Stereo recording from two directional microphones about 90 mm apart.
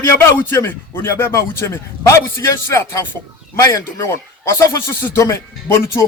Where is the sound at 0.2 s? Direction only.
25° left (ahead or behind).